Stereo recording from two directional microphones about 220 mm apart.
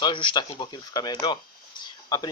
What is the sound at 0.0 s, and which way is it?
Speech, 20° left (ahead or behind).